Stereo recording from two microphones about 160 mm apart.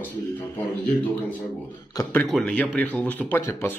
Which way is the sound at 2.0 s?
10° left (ahead or behind).